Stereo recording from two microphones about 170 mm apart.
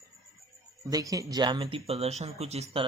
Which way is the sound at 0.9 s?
20° right (ahead or behind).